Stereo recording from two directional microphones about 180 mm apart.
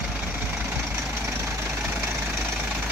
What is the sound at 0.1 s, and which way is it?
Vehicle, 10° right (ahead or behind).